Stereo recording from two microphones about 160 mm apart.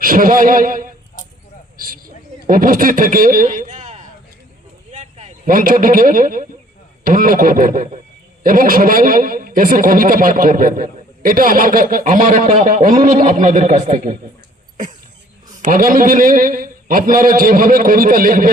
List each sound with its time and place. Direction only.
0.0 s a man's voice: 60° right (ahead or behind)
1.7 s a sound: 65° right (ahead or behind); by 5.3 s 45° right (ahead or behind)
5.5 s a man's voice: 60° right (ahead or behind)
15.5 s a man's voice: 55° right (ahead or behind)